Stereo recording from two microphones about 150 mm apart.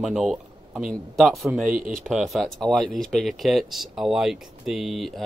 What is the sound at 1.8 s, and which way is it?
Speech, 65° right (ahead or behind).